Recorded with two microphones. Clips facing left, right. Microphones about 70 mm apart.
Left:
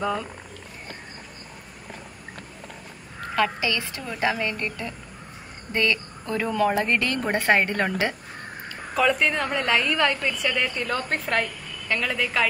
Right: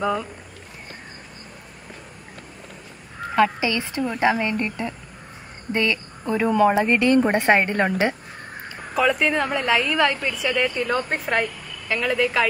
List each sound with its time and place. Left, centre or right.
0.0 s a woman's voice: centre
3.3 s a woman's voice: centre
8.9 s a woman's voice: centre